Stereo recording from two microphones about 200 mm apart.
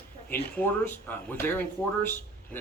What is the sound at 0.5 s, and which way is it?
Speech, 10° left (ahead or behind).